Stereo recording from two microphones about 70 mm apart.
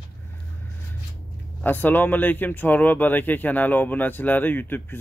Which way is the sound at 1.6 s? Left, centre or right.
Left.